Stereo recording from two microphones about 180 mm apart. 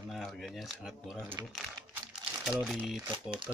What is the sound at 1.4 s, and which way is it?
Speech, 20° right (ahead or behind).